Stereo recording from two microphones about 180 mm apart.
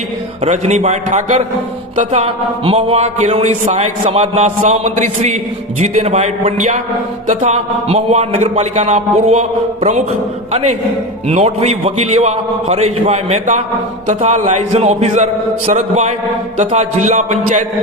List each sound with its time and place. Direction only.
0.4 s speech: 40° right (ahead or behind)